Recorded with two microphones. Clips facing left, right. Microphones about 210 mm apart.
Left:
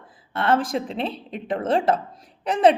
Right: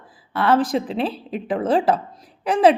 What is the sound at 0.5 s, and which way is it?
A woman's voice, centre (ahead or behind).